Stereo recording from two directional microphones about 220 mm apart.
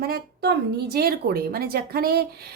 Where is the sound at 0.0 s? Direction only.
45° right (ahead or behind).